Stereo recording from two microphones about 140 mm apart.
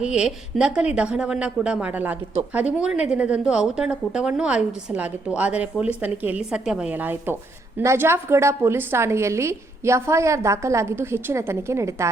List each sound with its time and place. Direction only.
0.0 s a woman's voice: 5° right (ahead or behind); by 12.0 s 20° right (ahead or behind)